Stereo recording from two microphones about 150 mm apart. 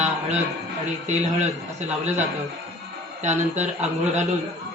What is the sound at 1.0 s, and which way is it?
Speech, 50° right (ahead or behind).